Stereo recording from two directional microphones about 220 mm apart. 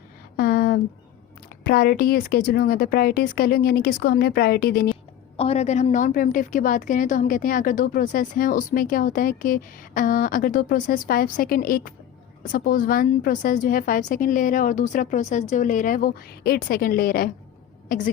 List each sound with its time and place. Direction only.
0.3 s a sound: 45° left (ahead or behind)
1.6 s speech: 45° left (ahead or behind)
5.4 s a woman's voice: 30° left (ahead or behind)